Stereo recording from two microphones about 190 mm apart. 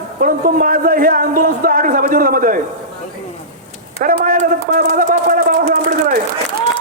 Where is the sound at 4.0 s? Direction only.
45° right (ahead or behind).